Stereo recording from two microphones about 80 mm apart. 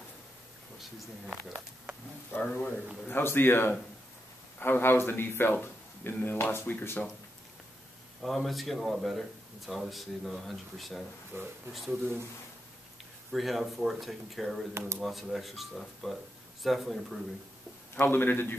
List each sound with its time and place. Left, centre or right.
0.7 s speech: centre
1.3 s speech: centre
2.4 s speech: centre
3.1 s speech: left
8.2 s speech: centre
11.3 s speech: right
11.7 s speech: centre
13.3 s speech: centre
14.7 s speech: right
15.0 s speech: centre
17.9 s speech: left